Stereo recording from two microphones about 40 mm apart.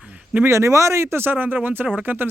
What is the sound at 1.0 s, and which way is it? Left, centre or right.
Speech, right.